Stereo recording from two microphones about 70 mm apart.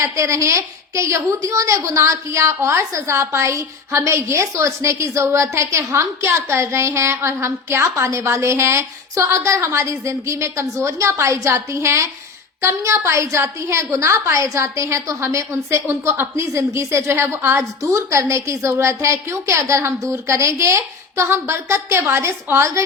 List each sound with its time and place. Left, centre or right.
0.0 s a woman's voice: right